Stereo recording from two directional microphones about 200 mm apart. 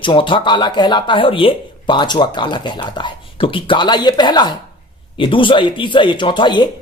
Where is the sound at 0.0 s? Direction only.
25° left (ahead or behind).